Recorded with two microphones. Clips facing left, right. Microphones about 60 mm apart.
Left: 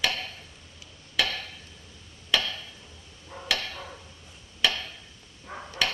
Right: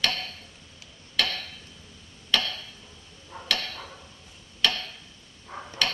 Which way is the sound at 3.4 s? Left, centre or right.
Centre.